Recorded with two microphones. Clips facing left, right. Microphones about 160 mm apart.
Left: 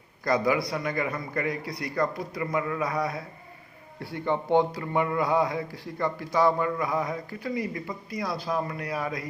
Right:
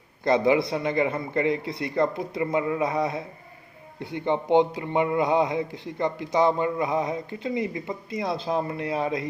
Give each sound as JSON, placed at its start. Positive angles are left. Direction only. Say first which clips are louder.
{"t": 0.3, "sound": "speech", "louder": "right 4 dB", "side_deg": -25}